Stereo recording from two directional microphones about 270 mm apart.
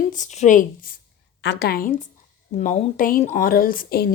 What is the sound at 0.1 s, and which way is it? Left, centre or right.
Speech, left.